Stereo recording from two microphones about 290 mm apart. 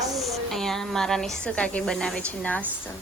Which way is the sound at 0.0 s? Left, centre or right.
Centre.